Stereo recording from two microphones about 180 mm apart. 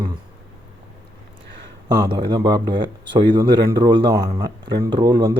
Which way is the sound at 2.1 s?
25° right (ahead or behind).